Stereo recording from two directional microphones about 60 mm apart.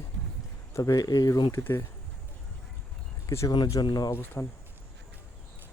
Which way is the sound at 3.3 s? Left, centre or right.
Left.